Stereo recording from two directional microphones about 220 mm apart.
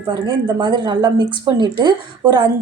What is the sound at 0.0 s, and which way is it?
A woman's voice, 20° right (ahead or behind).